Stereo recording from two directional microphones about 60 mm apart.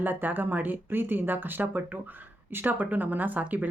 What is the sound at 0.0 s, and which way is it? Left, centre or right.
Speech, right.